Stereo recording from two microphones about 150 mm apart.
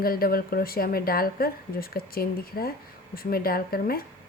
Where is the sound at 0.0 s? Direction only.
80° left.